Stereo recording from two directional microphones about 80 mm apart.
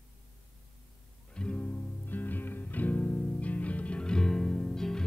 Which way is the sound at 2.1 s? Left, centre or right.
Left.